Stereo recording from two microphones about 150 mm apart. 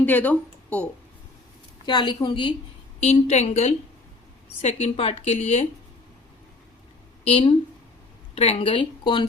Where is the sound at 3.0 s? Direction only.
45° left (ahead or behind).